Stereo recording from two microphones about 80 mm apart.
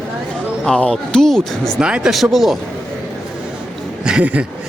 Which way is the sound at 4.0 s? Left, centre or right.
Centre.